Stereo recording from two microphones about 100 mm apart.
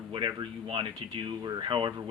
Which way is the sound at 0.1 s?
45° right (ahead or behind).